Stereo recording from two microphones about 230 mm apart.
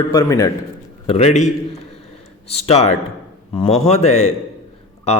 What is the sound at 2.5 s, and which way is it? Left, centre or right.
A man's voice, left.